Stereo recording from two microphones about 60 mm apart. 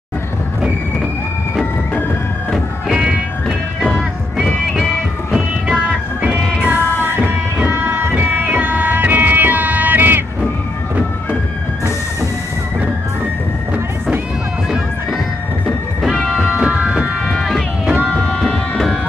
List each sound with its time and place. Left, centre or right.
6.2 s music: right
16.0 s music: centre
16.3 s train: centre
17.4 s run: centre
18.0 s music: centre